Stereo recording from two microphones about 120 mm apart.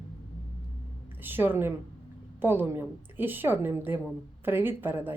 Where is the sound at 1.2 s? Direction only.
15° right (ahead or behind).